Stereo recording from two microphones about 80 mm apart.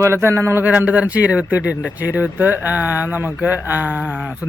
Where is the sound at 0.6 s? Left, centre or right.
Right.